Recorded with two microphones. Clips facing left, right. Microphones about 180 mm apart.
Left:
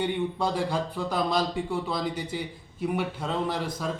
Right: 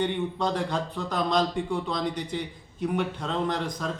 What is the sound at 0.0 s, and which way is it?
Speech, 10° left (ahead or behind).